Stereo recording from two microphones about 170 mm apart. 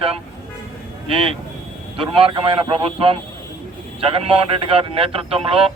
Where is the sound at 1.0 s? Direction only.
35° right (ahead or behind).